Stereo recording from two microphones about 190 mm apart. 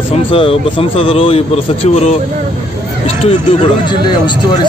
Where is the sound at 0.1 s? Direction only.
30° left (ahead or behind).